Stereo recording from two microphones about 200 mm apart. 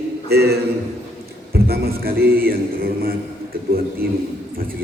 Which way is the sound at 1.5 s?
50° right (ahead or behind).